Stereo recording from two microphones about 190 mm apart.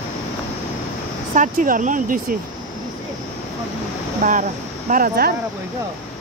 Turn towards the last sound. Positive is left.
turn(degrees=-50)  # may be behind; listen again after turning